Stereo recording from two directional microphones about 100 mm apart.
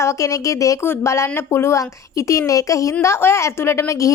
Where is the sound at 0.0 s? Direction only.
35° left (ahead or behind).